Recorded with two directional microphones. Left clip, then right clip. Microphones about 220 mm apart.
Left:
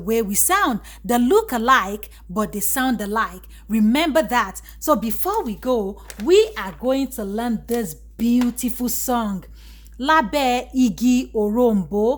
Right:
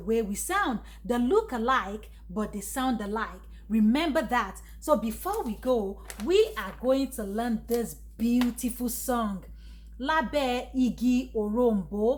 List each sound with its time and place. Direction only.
0.1 s a woman's voice: 50° left (ahead or behind)
4.9 s a woman's voice: 50° left (ahead or behind)